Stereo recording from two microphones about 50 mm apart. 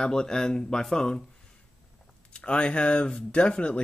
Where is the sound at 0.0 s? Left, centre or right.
Centre.